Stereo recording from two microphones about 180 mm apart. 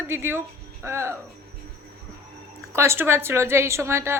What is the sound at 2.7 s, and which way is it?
A woman's voice, 15° right (ahead or behind).